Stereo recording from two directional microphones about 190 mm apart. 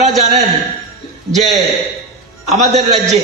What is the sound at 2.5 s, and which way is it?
Speech, 35° right (ahead or behind).